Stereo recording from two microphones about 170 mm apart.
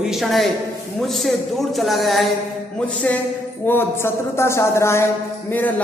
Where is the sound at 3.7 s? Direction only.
15° left (ahead or behind).